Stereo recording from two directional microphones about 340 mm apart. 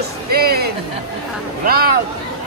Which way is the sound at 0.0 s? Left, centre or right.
Right.